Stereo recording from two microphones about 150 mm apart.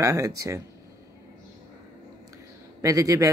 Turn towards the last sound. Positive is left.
turn(degrees=-20)  # may be behind; listen again after turning